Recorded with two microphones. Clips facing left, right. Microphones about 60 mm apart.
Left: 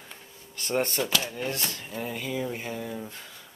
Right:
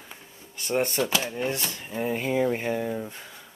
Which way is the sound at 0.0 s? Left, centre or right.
Centre.